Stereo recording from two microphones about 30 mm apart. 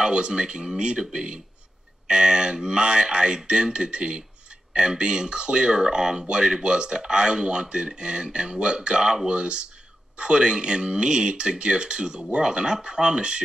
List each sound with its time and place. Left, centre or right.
0.0 s speech: right